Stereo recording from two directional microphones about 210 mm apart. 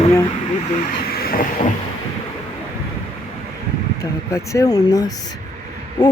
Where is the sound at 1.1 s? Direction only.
45° left (ahead or behind).